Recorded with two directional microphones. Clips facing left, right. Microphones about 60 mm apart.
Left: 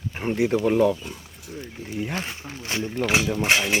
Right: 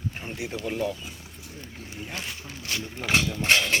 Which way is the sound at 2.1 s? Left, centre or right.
Left.